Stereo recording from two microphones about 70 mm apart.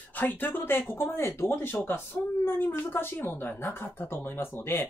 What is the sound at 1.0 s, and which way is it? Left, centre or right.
Speech, left.